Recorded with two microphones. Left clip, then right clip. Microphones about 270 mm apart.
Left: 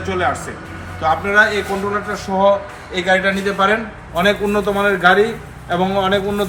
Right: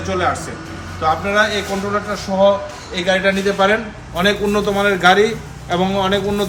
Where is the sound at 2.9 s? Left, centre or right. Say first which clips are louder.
Even; centre.